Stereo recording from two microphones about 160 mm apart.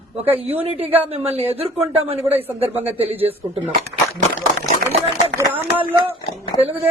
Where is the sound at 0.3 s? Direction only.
40° right (ahead or behind).